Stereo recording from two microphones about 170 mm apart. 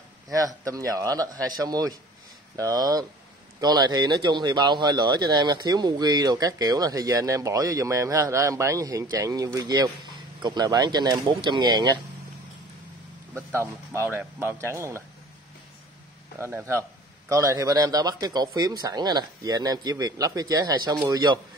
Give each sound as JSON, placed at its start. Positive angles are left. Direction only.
{"t": 0.3, "sound": "speech", "side_deg": -20}
{"t": 13.3, "sound": "speech", "side_deg": -15}
{"t": 16.3, "sound": "speech", "side_deg": -15}